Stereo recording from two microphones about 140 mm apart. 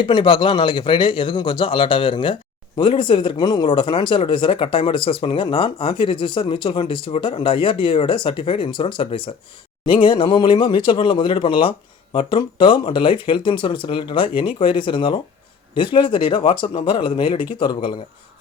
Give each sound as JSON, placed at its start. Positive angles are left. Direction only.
{"t": 0.0, "sound": "a man's voice", "side_deg": 35}